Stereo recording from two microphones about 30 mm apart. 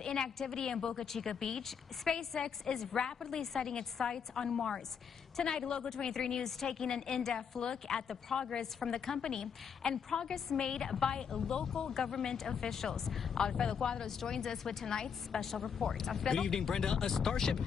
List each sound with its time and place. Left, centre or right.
0.0 s a woman's voice: left
12.5 s a woman's voice: centre
13.4 s a woman's voice: left
16.3 s speech: left